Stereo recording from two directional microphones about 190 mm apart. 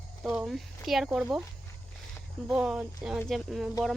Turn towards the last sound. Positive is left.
turn(degrees=0)  # may be behind; listen again after turning